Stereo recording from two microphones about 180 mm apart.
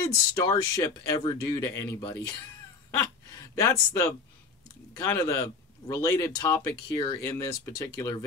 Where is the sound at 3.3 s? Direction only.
20° left (ahead or behind).